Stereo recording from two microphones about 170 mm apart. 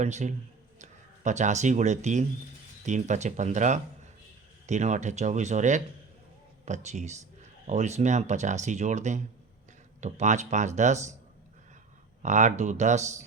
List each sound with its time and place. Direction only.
0.0 s speech: 45° right (ahead or behind)
12.2 s speech: 45° right (ahead or behind)